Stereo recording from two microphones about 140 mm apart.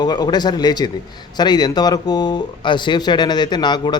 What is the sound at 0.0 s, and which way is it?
A man's voice, 30° left (ahead or behind).